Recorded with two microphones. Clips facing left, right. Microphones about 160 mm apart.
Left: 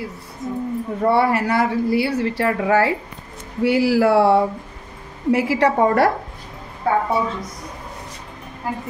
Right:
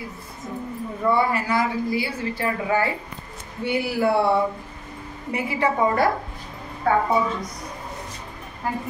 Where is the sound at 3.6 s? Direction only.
90° left; by 6.1 s 70° left (ahead or behind).